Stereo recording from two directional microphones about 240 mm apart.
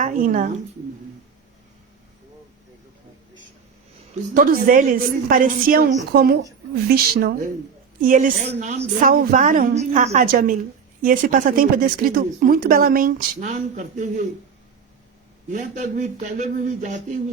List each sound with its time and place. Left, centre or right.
0.0 s a woman's voice: right
4.1 s a woman's voice: right
15.5 s speech: right